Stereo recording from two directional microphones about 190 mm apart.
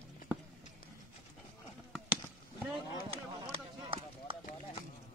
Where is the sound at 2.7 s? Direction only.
30° right (ahead or behind).